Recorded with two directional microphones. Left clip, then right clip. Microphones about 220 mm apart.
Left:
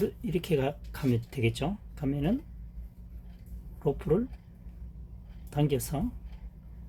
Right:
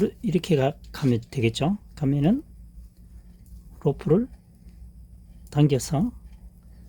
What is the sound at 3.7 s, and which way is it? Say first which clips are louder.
Speech: right 5 dB; 50° right (ahead or behind).